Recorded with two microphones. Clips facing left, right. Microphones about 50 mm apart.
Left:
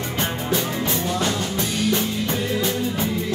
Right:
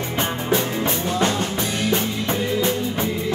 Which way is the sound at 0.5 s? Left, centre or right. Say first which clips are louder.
Right 3 dB; right.